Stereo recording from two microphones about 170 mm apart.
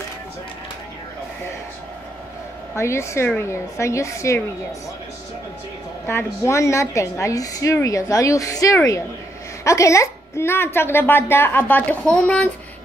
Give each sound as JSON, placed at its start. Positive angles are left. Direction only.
{"t": 2.7, "sound": "a woman's voice", "side_deg": 15}
{"t": 6.0, "sound": "a woman's voice", "side_deg": 15}